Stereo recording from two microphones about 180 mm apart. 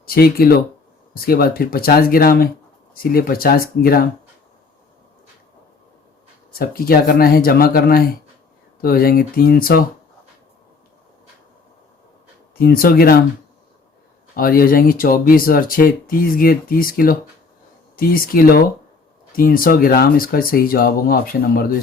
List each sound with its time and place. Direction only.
0.0 s speech: 55° left (ahead or behind)
6.6 s speech: 55° left (ahead or behind)
12.5 s speech: 55° left (ahead or behind)
14.3 s speech: 55° left (ahead or behind)